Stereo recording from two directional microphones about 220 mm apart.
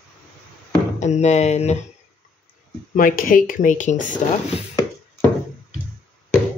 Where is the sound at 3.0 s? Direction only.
40° left (ahead or behind).